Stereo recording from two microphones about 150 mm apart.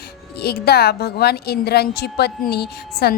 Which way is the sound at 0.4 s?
90° left.